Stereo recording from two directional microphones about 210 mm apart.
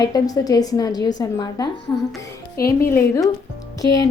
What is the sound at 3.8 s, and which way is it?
Speech, 15° left (ahead or behind).